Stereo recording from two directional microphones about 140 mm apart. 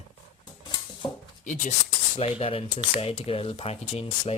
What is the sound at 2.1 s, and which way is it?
Speech, 45° left (ahead or behind).